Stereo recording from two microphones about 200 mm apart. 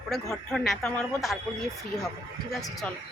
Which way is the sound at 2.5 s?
Centre (ahead or behind).